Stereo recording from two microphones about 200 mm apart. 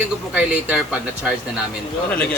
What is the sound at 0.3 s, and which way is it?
Speech, 5° right (ahead or behind).